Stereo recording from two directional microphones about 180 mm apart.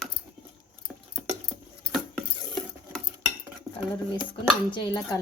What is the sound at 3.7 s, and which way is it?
Cutlery, 15° right (ahead or behind).